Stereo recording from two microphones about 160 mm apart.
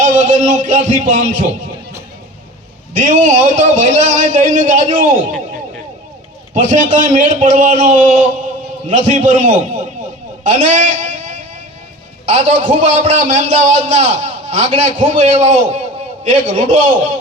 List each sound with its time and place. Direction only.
0.0 s a man's voice: 50° right (ahead or behind)
2.9 s a man's voice: 50° right (ahead or behind)
6.5 s a man's voice: 50° right (ahead or behind)